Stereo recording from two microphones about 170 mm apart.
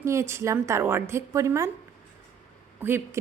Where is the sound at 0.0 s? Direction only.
15° right (ahead or behind).